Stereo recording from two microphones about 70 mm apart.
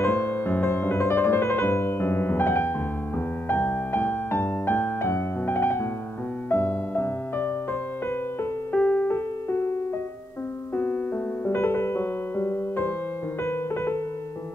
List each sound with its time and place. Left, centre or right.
0.0 s piano: left
3.4 s keyboard: left
6.5 s music: left
8.7 s music: left
11.4 s music: left
13.4 s piano: left